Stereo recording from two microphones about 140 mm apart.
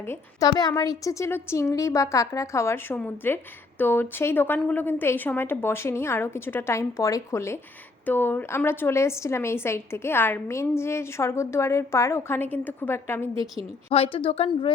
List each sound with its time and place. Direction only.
0.0 s a woman's voice: 20° left (ahead or behind)
13.9 s a woman's voice: 40° left (ahead or behind)